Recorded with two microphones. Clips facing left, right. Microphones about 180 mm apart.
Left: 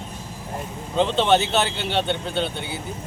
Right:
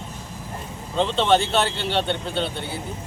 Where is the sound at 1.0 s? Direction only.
5° left (ahead or behind).